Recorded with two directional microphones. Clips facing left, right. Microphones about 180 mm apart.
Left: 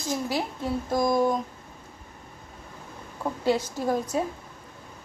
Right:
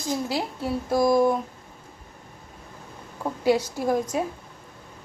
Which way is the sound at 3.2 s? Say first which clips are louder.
Right 3 dB; 10° right (ahead or behind).